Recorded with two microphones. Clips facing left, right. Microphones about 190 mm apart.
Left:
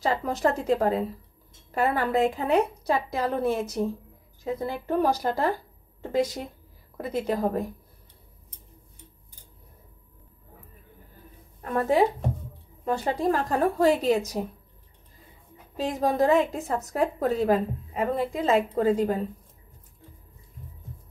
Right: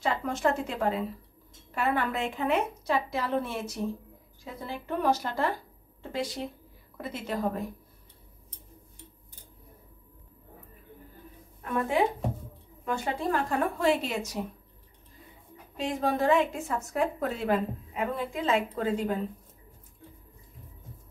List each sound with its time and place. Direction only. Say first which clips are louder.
0.0 s a woman's voice: left 3 dB; 40° left (ahead or behind)
4.6 s a woman's voice: left 5 dB; 40° left (ahead or behind)
11.7 s a woman's voice: left 4 dB; 40° left (ahead or behind)
15.7 s a woman's voice: left 3 dB; 40° left (ahead or behind)